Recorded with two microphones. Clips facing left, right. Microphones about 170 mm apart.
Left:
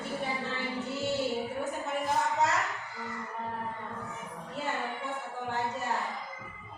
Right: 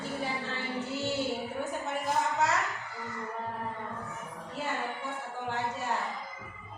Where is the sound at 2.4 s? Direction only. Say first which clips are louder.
Even; centre (ahead or behind).